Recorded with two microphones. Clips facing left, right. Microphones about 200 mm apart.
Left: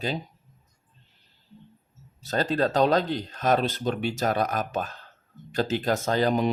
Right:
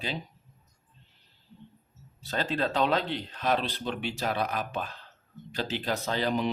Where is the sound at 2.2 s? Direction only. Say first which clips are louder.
Left 5 dB; 40° left (ahead or behind).